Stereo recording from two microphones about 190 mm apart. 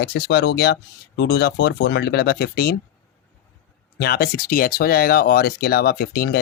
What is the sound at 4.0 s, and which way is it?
Speech, 55° left (ahead or behind).